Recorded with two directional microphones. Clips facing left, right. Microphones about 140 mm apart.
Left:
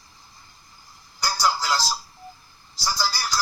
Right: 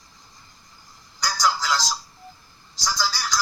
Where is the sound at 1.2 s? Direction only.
10° left (ahead or behind).